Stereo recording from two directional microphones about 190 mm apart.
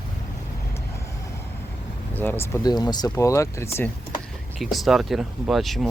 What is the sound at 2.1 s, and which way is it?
Speech, 10° left (ahead or behind).